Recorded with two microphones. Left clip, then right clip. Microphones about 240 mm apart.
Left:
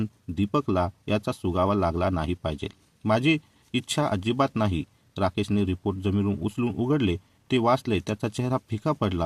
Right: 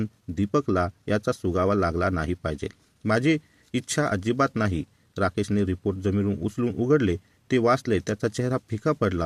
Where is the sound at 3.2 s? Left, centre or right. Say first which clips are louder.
Even; right.